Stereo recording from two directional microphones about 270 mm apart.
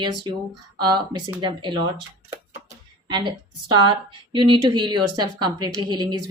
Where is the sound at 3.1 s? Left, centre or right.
Centre.